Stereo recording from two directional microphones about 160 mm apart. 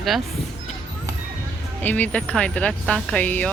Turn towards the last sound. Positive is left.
turn(degrees=10)  # may be behind; listen again after turning